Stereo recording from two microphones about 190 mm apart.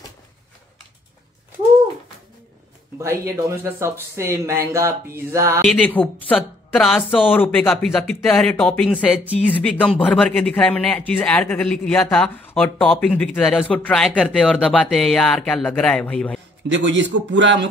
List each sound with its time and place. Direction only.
3.0 s speech: 15° right (ahead or behind)
5.7 s speech: 10° left (ahead or behind)
16.7 s a man's voice: 75° right (ahead or behind)